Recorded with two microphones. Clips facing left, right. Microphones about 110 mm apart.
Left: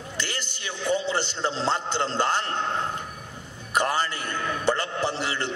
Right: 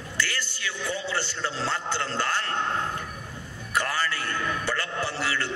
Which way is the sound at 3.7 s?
20° left (ahead or behind).